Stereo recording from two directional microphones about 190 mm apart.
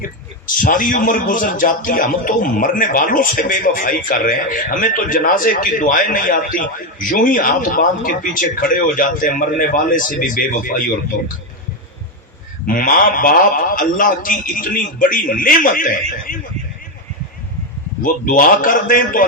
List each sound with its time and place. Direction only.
0.0 s a man's voice: 45° left (ahead or behind)
12.6 s a man's voice: 45° left (ahead or behind)
18.0 s a man's voice: 45° left (ahead or behind)